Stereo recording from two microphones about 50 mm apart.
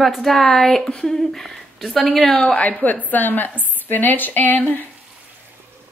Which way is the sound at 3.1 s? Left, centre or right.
Left.